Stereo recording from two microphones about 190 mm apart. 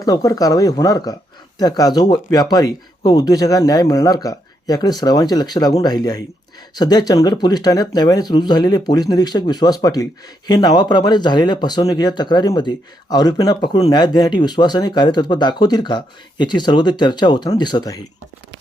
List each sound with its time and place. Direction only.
0.0 s speech: 20° left (ahead or behind)